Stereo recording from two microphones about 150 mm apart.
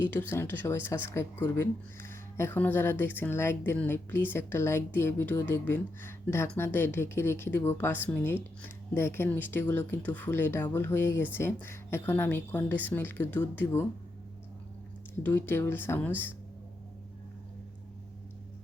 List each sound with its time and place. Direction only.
0.0 s speech: 15° left (ahead or behind)
15.2 s speech: 15° left (ahead or behind)